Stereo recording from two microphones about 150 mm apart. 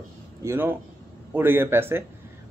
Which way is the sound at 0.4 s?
15° right (ahead or behind).